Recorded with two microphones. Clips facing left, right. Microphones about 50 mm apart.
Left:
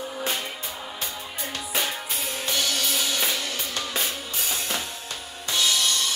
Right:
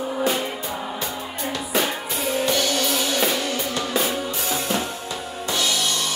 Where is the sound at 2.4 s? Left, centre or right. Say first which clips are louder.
Right 3 dB; centre.